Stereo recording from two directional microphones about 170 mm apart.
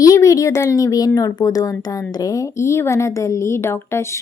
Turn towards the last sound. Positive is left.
turn(degrees=15)  # may be behind; listen again after turning